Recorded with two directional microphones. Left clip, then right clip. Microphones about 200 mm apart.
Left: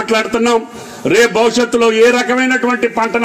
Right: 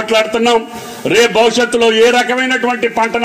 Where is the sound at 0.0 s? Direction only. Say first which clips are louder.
Right 2 dB; 30° left (ahead or behind).